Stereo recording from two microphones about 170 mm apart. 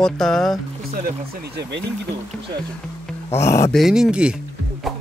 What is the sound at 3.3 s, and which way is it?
Speech, 15° left (ahead or behind).